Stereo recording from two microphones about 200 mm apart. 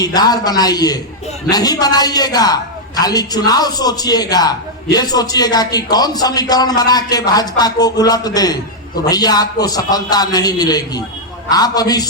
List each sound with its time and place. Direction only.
0.0 s a man's voice: 20° left (ahead or behind)